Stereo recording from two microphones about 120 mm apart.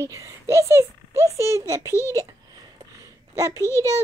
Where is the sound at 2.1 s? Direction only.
30° right (ahead or behind).